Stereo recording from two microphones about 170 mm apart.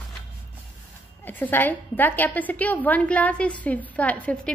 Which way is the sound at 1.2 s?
10° left (ahead or behind).